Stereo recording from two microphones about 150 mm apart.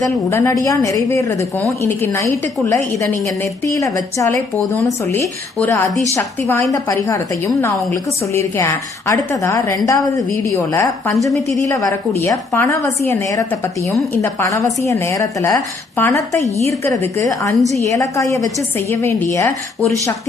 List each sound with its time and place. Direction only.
0.0 s a woman's voice: 20° left (ahead or behind)
11.2 s a woman's voice: centre (ahead or behind)
11.6 s a woman's voice: 20° left (ahead or behind)